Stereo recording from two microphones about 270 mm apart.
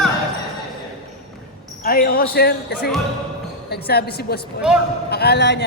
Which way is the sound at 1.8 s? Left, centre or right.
Left.